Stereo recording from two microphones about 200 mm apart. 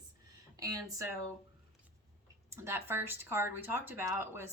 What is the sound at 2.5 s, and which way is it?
Speech, 15° right (ahead or behind).